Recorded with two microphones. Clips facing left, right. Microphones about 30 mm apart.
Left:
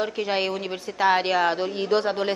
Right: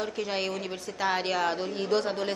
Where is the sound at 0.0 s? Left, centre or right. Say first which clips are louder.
Left 6 dB; left.